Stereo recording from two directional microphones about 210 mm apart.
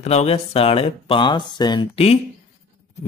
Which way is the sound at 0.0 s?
30° left (ahead or behind).